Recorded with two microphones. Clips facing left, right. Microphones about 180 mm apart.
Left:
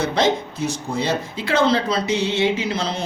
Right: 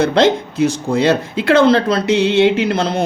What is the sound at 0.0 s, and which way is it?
Speech, 65° right (ahead or behind).